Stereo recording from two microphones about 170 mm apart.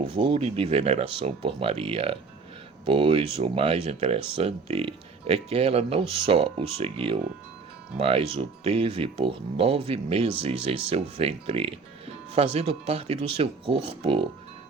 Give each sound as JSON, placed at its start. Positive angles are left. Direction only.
{"t": 0.2, "sound": "speech", "side_deg": -35}